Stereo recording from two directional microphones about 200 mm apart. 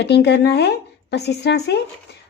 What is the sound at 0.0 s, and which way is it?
Speech, 55° left (ahead or behind).